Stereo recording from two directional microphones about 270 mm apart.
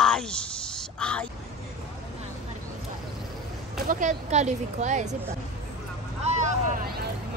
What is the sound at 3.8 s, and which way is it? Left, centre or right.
Speech, right.